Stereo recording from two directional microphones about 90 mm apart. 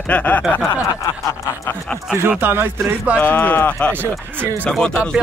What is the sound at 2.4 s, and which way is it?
Speech, 25° right (ahead or behind).